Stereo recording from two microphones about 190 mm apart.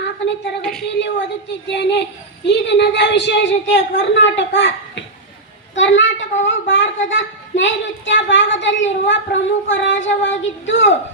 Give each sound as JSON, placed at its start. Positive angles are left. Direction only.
{"t": 0.6, "sound": "a woman's voice", "side_deg": 0}
{"t": 0.9, "sound": "a woman's voice", "side_deg": 65}
{"t": 5.7, "sound": "a woman's voice", "side_deg": 75}